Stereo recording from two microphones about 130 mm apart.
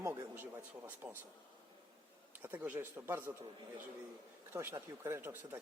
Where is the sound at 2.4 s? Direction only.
15° right (ahead or behind).